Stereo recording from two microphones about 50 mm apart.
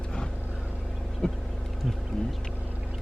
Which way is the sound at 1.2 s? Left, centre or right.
Centre.